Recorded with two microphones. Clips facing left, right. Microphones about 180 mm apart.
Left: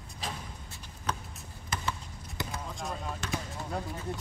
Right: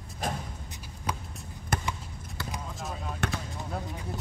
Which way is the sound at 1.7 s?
55° right (ahead or behind).